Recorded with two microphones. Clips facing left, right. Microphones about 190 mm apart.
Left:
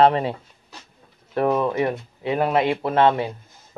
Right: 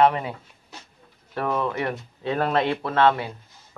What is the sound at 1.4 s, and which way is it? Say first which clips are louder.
Speech: left 5 dB; 20° left (ahead or behind).